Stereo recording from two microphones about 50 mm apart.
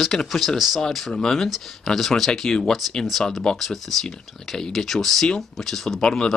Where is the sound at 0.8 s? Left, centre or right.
Centre.